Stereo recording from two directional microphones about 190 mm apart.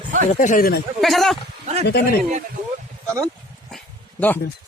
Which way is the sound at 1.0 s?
Centre (ahead or behind).